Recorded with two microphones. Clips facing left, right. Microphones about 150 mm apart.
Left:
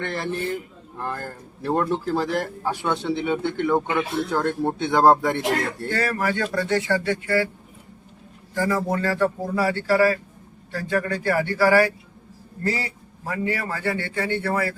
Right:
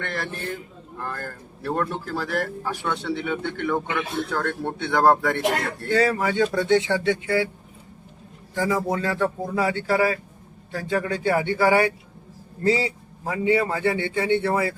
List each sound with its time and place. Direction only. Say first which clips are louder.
0.0 s speech: left 4 dB; 15° left (ahead or behind)
5.9 s a man's voice: right 5 dB; 15° right (ahead or behind)
8.5 s a man's voice: even; 15° right (ahead or behind)